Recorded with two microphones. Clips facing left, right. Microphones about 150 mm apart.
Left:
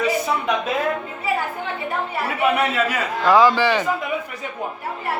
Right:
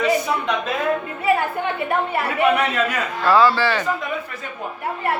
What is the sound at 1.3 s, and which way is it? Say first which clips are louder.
Speech: right 5 dB; 60° right (ahead or behind).